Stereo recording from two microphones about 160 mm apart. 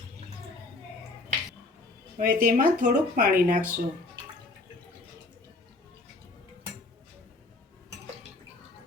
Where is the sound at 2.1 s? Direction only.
55° right (ahead or behind).